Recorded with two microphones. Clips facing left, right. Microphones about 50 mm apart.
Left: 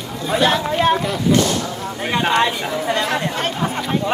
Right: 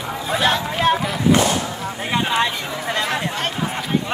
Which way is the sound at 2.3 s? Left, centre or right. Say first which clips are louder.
Left 3 dB; centre.